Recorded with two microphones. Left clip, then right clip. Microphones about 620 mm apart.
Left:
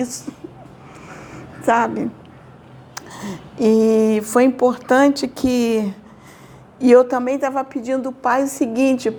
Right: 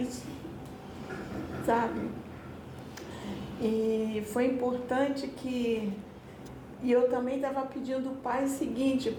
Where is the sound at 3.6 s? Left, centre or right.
Left.